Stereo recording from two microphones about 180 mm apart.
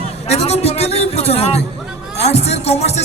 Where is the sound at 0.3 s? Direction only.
35° left (ahead or behind).